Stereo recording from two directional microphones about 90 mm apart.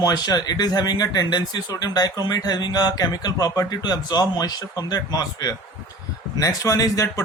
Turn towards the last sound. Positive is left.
turn(degrees=35)  # may be behind; listen again after turning